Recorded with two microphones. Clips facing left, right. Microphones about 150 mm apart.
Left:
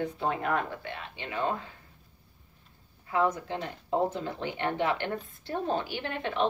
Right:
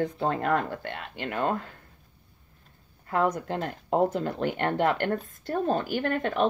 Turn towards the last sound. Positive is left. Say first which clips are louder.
# right 5 dB
turn(degrees=-45)  # may be behind; listen again after turning